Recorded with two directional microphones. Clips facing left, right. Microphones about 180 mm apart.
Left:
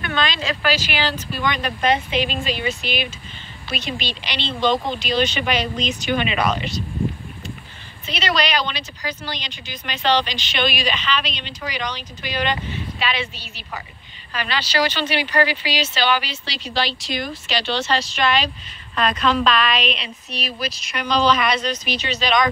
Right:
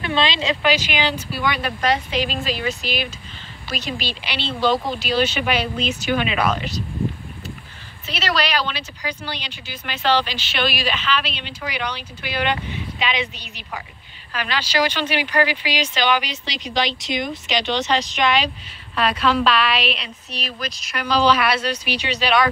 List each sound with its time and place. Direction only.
0.0 s speech: 25° right (ahead or behind); by 6.7 s centre (ahead or behind)
8.0 s speech: 5° right (ahead or behind)
20.2 s speech: 10° left (ahead or behind); by 22.5 s 10° right (ahead or behind)